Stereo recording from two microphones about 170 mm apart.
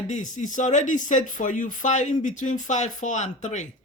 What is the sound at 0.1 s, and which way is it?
Speech, 45° left (ahead or behind).